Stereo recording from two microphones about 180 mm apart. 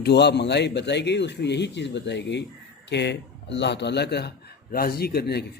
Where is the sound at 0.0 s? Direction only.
70° left (ahead or behind).